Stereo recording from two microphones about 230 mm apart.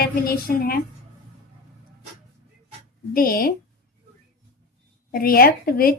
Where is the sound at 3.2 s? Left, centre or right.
Left.